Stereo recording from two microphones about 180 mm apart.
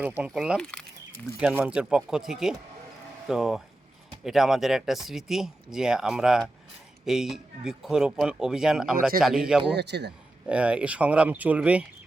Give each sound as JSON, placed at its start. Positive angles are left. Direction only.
{"t": 0.2, "sound": "speech", "side_deg": -5}
{"t": 1.4, "sound": "speech", "side_deg": -5}
{"t": 9.7, "sound": "a man's voice", "side_deg": -70}
{"t": 10.4, "sound": "speech", "side_deg": -5}